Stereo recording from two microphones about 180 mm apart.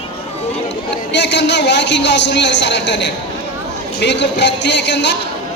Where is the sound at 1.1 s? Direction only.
75° left (ahead or behind).